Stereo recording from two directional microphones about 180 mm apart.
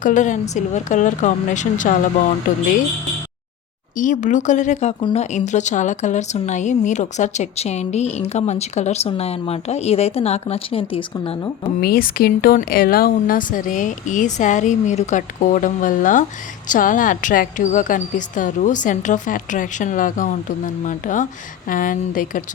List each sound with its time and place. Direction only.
0.0 s speech: 45° left (ahead or behind)
3.9 s speech: 45° left (ahead or behind)
11.8 s speech: 55° left (ahead or behind)